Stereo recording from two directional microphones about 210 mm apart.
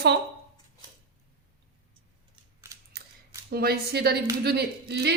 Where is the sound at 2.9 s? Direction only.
45° right (ahead or behind).